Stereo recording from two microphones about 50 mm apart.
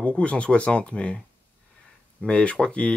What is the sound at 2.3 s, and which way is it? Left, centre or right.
Speech, left.